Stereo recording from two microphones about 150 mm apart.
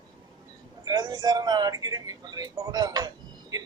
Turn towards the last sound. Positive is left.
turn(degrees=-25)  # may be behind; listen again after turning